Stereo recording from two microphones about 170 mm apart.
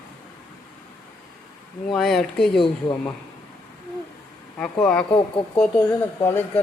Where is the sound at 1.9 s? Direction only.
Centre (ahead or behind).